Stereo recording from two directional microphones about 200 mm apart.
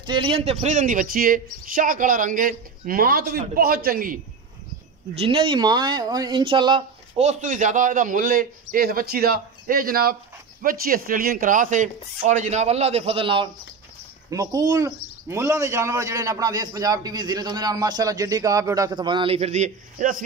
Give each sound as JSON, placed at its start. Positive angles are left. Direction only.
{"t": 0.0, "sound": "speech", "side_deg": -25}
{"t": 5.1, "sound": "speech", "side_deg": -30}